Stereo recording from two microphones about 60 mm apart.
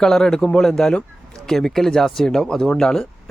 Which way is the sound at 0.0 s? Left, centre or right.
Centre.